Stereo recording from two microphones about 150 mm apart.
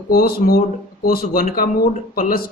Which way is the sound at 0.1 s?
80° left.